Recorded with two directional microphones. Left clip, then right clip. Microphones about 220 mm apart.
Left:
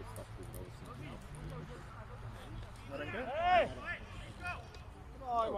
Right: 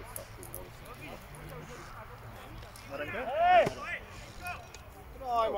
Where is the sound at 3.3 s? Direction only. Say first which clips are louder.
Right 6 dB; 50° left (ahead or behind).